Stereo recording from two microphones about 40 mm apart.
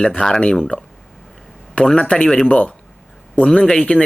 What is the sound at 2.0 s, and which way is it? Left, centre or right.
Speech, left.